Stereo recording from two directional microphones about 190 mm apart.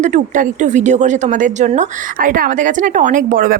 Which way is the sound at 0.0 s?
40° right (ahead or behind).